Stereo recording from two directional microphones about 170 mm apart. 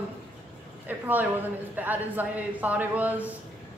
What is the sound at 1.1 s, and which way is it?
Speech, 10° right (ahead or behind).